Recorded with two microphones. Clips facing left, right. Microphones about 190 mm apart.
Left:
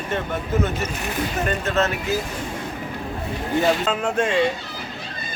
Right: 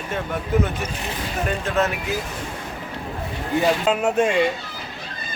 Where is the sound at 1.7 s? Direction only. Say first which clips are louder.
Even; 15° right (ahead or behind).